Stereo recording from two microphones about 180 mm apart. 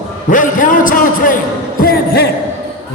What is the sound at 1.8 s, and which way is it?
Music, 55° left (ahead or behind).